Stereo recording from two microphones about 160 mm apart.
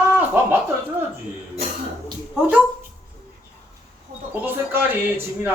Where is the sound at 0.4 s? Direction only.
15° right (ahead or behind).